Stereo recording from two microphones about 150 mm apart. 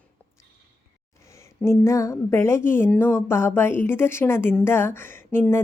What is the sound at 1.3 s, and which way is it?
Speech, 20° left (ahead or behind).